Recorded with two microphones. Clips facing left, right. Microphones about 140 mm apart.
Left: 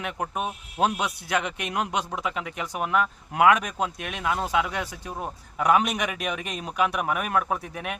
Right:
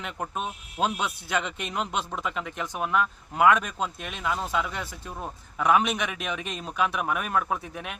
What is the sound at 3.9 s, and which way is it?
Speech, 55° left (ahead or behind).